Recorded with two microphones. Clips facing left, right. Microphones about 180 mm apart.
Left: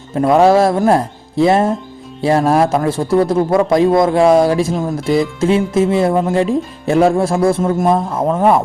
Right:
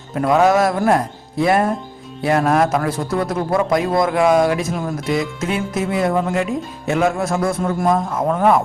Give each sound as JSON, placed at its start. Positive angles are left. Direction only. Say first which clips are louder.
{"t": 0.1, "sound": "speech", "louder": "left 4 dB", "side_deg": 30}